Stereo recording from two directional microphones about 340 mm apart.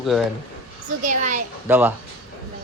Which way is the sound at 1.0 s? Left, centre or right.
Right.